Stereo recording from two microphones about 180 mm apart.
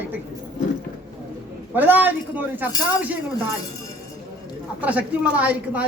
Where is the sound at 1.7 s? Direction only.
10° right (ahead or behind).